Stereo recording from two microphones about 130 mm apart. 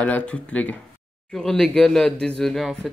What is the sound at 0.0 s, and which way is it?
Speech, 10° left (ahead or behind).